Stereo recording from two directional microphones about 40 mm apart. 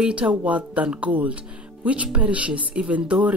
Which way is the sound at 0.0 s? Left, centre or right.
Right.